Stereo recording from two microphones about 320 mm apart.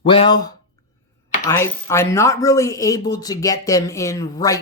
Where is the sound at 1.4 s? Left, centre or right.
Centre.